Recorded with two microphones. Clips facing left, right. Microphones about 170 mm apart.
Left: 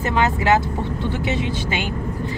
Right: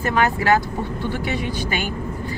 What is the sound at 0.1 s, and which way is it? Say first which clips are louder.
Speech: even; 20° left (ahead or behind).